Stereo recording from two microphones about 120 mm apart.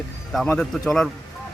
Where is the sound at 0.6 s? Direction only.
5° left (ahead or behind).